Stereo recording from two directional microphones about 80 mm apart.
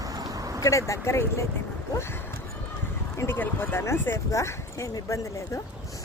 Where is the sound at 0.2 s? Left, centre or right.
Right.